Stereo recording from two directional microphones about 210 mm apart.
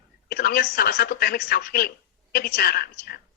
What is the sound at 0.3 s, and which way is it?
A woman's voice, 45° left (ahead or behind).